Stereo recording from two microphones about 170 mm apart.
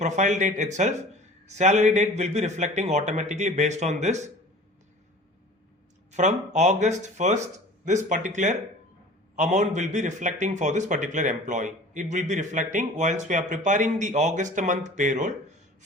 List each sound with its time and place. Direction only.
0.0 s a man's voice: 45° right (ahead or behind)
6.1 s a man's voice: 45° right (ahead or behind)